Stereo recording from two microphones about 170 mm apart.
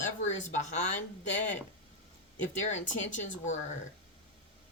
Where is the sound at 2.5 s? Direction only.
45° left (ahead or behind).